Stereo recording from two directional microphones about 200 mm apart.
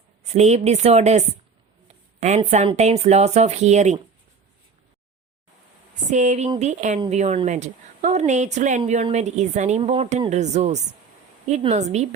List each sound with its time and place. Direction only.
0.2 s speech: 35° right (ahead or behind)
6.1 s speech: 35° right (ahead or behind)